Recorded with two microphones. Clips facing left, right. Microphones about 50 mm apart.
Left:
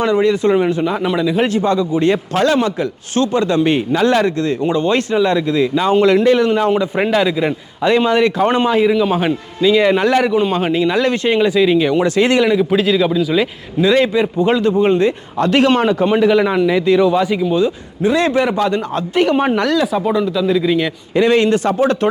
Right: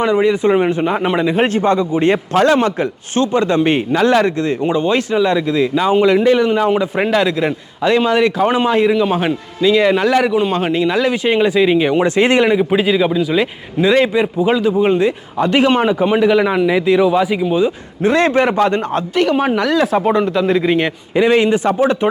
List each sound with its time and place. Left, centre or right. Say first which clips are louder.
0.0 s a man's voice: even; centre
6.9 s a man's voice: even; centre
18.0 s speech: right 1 dB; right
19.1 s a man's voice: left 1 dB; centre
19.9 s speech: right 2 dB; right
21.2 s a man's voice: even; centre